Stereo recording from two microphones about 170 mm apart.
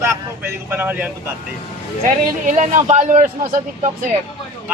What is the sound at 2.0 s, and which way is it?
A man's voice, 50° right (ahead or behind).